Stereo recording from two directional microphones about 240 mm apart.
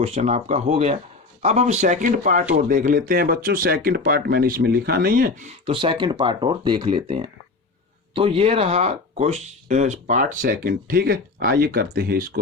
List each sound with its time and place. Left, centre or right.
0.0 s speech: right